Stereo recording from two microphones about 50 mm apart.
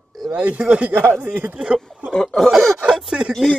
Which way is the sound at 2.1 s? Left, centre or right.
Centre.